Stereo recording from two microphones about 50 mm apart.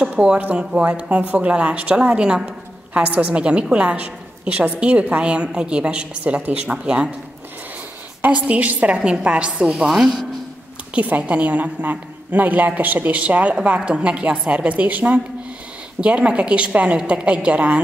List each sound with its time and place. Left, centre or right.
0.0 s a sound: right
0.6 s a woman's voice: centre
1.2 s a woman's voice: right
1.5 s a woman's voice: right
2.9 s a woman's voice: right
6.4 s a woman's voice: right
8.2 s a woman's voice: right
9.8 s speech: centre
11.0 s a woman's voice: right